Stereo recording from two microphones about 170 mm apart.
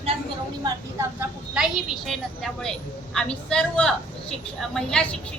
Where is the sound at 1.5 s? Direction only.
Centre (ahead or behind).